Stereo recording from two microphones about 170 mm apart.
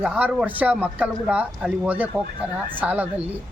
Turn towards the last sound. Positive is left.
turn(degrees=-10)  # may be behind; listen again after turning